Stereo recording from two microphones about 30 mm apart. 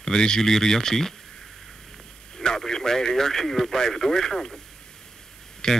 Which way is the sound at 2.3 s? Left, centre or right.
Centre.